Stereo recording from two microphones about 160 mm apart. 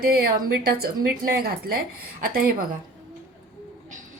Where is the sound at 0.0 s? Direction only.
70° right (ahead or behind).